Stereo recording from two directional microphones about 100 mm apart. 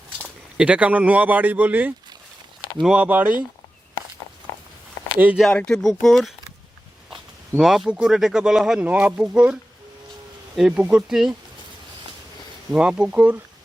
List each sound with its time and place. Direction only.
0.5 s speech: 10° right (ahead or behind)
5.4 s speech: 10° left (ahead or behind)
7.5 s speech: 5° right (ahead or behind)
12.7 s speech: 10° right (ahead or behind)